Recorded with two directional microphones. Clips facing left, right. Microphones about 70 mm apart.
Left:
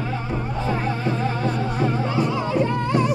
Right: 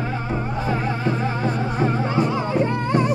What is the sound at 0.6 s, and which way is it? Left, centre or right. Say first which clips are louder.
Music: even; centre.